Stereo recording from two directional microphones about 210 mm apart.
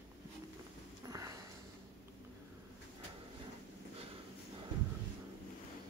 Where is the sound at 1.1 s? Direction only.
15° right (ahead or behind).